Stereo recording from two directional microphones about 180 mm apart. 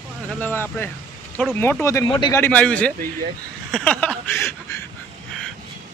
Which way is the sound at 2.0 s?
25° left (ahead or behind).